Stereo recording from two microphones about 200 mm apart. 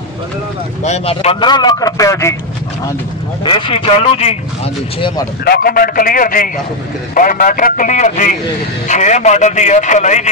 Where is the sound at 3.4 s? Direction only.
25° left (ahead or behind).